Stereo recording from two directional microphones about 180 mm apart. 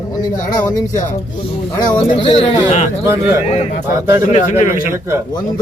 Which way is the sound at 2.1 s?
30° left (ahead or behind).